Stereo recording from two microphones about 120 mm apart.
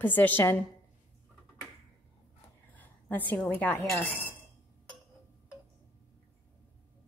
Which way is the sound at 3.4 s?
15° left (ahead or behind).